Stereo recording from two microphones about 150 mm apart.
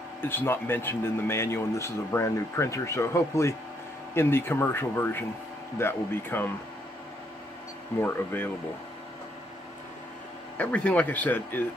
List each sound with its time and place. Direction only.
0.2 s speech: 15° left (ahead or behind)
8.0 s speech: 10° left (ahead or behind)
10.6 s speech: 10° left (ahead or behind)